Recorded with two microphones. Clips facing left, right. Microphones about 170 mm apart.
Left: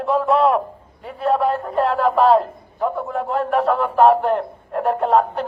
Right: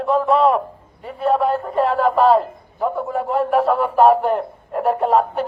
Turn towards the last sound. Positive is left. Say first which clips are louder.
# even
turn(degrees=0)  # may be behind; listen again after turning